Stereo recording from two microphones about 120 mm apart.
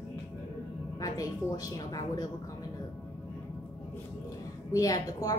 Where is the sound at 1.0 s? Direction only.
30° left (ahead or behind).